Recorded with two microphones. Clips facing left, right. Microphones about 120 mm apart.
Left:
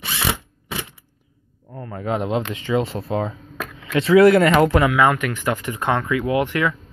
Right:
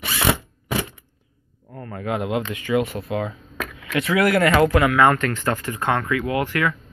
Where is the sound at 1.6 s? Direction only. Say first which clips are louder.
Left 2 dB; 20° left (ahead or behind).